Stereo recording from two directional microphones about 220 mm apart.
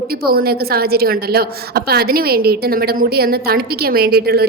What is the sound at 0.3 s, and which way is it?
A woman's voice, 45° right (ahead or behind).